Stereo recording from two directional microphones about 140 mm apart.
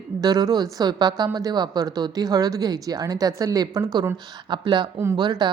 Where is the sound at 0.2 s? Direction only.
30° right (ahead or behind).